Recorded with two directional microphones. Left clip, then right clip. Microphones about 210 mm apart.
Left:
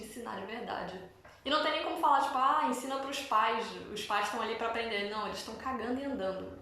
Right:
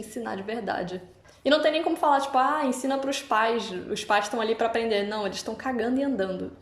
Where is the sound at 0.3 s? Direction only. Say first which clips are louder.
Right 8 dB; 50° right (ahead or behind).